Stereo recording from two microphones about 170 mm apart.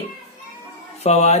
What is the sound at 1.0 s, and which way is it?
Speech, 40° left (ahead or behind).